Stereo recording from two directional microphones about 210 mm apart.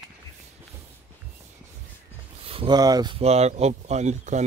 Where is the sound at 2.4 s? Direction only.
25° right (ahead or behind).